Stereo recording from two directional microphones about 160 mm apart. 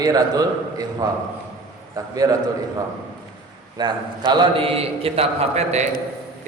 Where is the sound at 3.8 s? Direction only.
25° right (ahead or behind).